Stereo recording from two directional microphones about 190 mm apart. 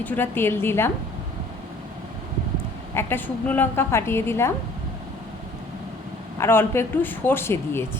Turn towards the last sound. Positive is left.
turn(degrees=10)  # may be behind; listen again after turning